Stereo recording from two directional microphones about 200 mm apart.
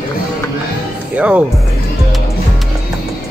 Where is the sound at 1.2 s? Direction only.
5° right (ahead or behind).